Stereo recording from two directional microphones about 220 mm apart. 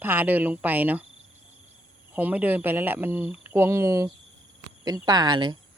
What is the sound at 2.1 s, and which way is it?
Speech, 10° right (ahead or behind).